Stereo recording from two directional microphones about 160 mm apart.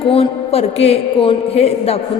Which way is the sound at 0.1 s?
40° left (ahead or behind).